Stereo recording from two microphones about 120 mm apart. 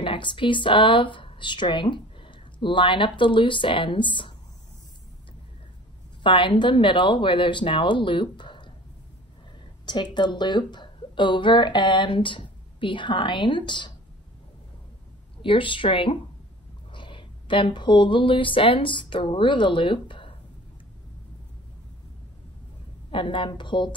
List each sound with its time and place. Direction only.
0.0 s speech: 45° left (ahead or behind)
6.2 s speech: 40° left (ahead or behind)
9.8 s speech: 40° left (ahead or behind)
15.4 s speech: 45° left (ahead or behind)
23.1 s speech: 45° left (ahead or behind)